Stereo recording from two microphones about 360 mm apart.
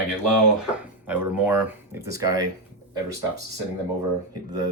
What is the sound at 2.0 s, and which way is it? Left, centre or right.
Speech, right.